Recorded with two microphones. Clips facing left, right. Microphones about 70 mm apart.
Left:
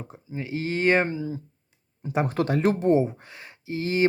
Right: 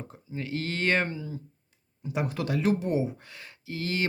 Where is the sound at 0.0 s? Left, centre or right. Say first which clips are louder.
Left 2 dB; centre.